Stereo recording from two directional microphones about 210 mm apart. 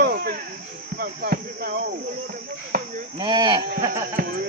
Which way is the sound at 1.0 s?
45° right (ahead or behind).